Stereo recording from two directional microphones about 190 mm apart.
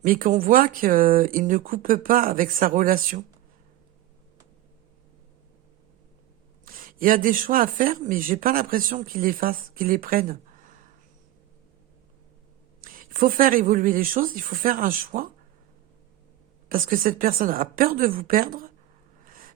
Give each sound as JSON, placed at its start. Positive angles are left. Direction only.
{"t": 0.0, "sound": "speech", "side_deg": -45}
{"t": 6.7, "sound": "speech", "side_deg": -45}
{"t": 12.8, "sound": "speech", "side_deg": -45}
{"t": 16.6, "sound": "speech", "side_deg": -45}
{"t": 19.2, "sound": "a sound", "side_deg": -45}